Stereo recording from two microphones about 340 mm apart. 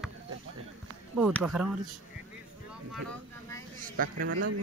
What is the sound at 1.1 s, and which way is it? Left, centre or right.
Speech, centre.